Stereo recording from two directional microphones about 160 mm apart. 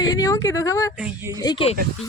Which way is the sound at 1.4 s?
25° left (ahead or behind).